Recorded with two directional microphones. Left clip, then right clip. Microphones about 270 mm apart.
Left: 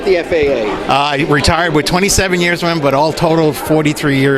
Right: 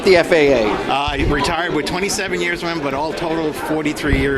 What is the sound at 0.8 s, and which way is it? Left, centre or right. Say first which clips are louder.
Speech: left 6 dB; left.